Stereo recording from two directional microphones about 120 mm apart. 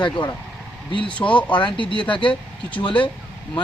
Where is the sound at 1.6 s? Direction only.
45° left (ahead or behind).